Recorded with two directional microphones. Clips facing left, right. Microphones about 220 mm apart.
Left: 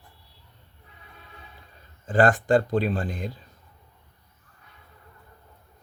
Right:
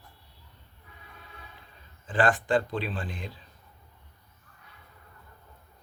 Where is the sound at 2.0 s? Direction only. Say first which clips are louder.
Left 5 dB; 45° left (ahead or behind).